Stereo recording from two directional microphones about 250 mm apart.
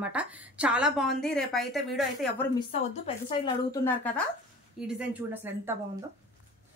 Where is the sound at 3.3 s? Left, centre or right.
Centre.